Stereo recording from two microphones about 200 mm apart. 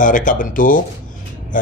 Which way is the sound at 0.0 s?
40° left (ahead or behind).